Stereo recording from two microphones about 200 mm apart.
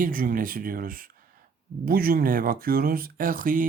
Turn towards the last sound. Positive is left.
turn(degrees=-45)  # may be behind; listen again after turning